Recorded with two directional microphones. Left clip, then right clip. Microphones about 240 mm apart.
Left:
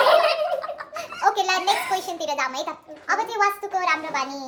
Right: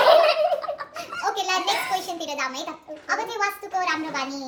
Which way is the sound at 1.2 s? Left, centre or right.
Centre.